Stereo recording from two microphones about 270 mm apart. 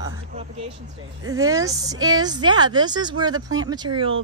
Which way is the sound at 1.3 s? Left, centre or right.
Centre.